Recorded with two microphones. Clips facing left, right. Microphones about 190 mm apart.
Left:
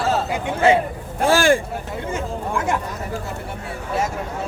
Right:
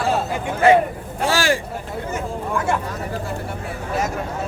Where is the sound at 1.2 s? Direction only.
55° left (ahead or behind).